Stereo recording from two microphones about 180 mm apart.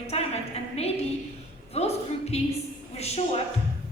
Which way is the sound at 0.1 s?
35° left (ahead or behind).